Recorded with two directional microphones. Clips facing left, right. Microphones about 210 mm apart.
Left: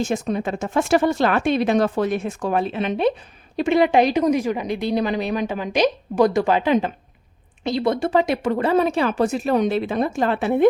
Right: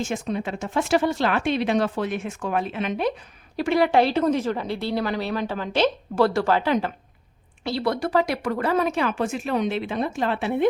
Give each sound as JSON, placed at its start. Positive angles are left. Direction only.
{"t": 0.0, "sound": "speech", "side_deg": 40}
{"t": 3.6, "sound": "a woman's voice", "side_deg": 20}